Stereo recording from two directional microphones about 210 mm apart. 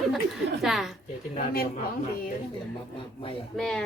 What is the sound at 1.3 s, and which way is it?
Speech, 45° left (ahead or behind).